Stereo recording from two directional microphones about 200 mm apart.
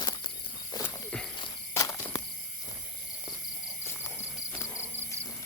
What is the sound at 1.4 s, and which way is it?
Walk, 15° left (ahead or behind).